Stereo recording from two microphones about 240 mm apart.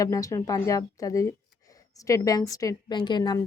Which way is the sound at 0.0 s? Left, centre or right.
Centre.